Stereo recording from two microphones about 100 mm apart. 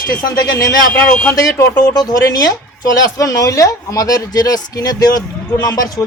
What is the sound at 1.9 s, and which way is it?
Speech, 40° left (ahead or behind).